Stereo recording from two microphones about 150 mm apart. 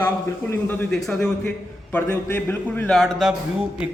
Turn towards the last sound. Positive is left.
turn(degrees=-5)  # may be behind; listen again after turning